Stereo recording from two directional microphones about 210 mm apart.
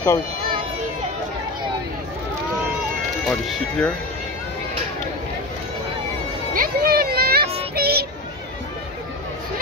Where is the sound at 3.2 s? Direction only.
Centre (ahead or behind).